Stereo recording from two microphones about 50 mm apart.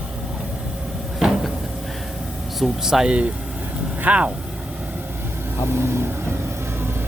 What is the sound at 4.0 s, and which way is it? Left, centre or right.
Speech, right.